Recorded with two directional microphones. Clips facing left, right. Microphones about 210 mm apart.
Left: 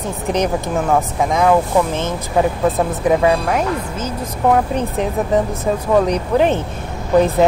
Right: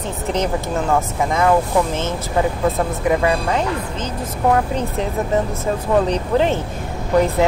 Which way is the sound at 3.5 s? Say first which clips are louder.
Left 2 dB; 10° left (ahead or behind).